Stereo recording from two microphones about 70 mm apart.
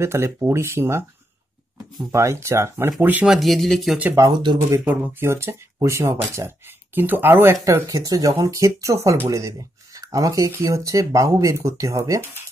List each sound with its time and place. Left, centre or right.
0.0 s speech: right
2.1 s speech: right
3.0 s speech: right
3.3 s speech: centre
4.2 s speech: right
4.8 s speech: right
5.2 s speech: right
7.0 s speech: right
7.8 s speech: right
8.4 s speech: right
9.5 s speech: right